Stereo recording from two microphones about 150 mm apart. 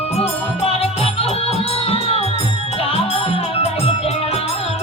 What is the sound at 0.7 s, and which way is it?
Music, 40° left (ahead or behind).